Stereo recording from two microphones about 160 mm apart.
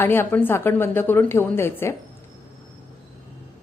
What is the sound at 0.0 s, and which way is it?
A woman's voice, 15° left (ahead or behind).